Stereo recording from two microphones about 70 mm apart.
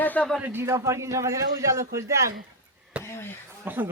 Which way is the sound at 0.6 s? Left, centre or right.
Right.